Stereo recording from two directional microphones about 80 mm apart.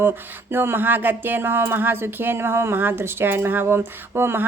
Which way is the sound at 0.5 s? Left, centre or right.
Right.